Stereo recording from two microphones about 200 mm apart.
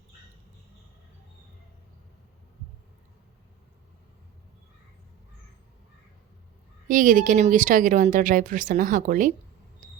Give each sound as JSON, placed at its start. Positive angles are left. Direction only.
{"t": 6.8, "sound": "speech", "side_deg": -40}